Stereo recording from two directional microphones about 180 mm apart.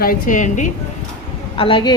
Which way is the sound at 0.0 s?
50° left (ahead or behind).